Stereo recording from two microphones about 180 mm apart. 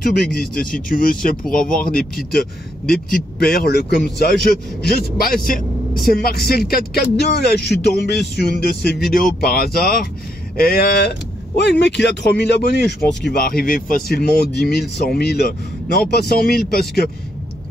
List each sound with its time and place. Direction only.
0.3 s speech: 55° left (ahead or behind)
1.6 s speech: 5° left (ahead or behind)
2.9 s a man's voice: 55° left (ahead or behind)